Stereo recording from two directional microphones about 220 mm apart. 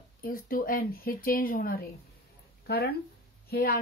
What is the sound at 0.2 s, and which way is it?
A woman's voice, 40° left (ahead or behind).